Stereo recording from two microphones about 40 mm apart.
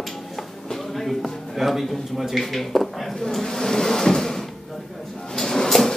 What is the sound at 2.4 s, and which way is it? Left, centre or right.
Drawer open or close, centre.